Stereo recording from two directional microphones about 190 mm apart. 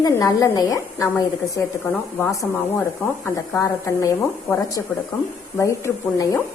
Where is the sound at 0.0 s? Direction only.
15° left (ahead or behind).